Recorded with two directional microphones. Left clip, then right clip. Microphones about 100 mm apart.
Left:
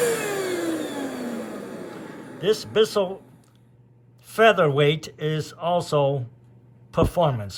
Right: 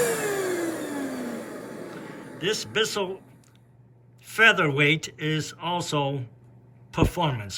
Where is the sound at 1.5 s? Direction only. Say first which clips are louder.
Left 2 dB; 50° left (ahead or behind).